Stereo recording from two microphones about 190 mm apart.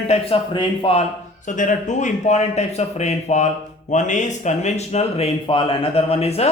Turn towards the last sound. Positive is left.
turn(degrees=35)  # may be behind; listen again after turning